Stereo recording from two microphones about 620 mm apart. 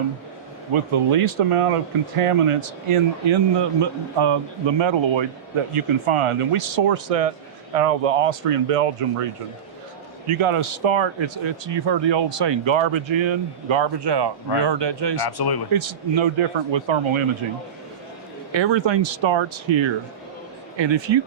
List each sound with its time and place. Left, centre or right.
0.7 s speech: right
10.2 s speech: right
15.3 s speech: left
15.7 s speech: right
18.5 s speech: right